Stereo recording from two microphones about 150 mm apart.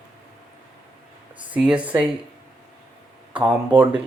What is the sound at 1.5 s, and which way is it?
Speech, 10° right (ahead or behind).